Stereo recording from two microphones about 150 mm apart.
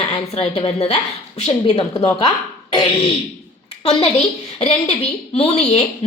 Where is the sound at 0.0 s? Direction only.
45° left (ahead or behind).